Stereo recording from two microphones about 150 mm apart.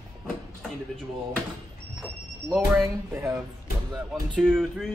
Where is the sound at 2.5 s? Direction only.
10° right (ahead or behind).